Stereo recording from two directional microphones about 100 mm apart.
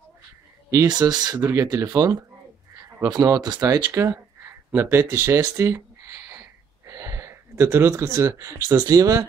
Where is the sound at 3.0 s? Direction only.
40° right (ahead or behind).